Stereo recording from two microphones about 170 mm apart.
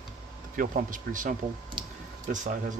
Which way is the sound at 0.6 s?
50° right (ahead or behind).